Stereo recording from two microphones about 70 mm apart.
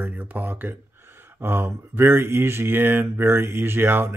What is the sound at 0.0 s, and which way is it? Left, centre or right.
Speech, right.